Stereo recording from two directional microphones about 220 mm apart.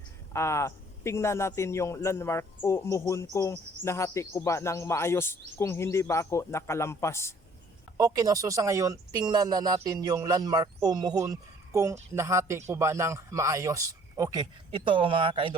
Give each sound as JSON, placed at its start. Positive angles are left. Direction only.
{"t": 0.3, "sound": "a man's voice", "side_deg": 15}
{"t": 7.9, "sound": "speech", "side_deg": -15}